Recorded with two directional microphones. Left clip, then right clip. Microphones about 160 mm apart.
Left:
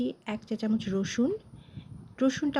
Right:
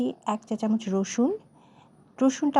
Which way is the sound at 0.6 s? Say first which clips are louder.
Right 2 dB; 30° left (ahead or behind).